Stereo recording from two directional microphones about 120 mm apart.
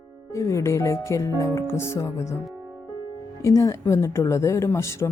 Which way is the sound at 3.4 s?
25° left (ahead or behind).